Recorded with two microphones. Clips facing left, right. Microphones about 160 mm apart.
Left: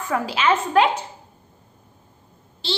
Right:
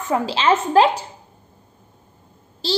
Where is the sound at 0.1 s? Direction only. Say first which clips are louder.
Right 3 dB; 30° right (ahead or behind).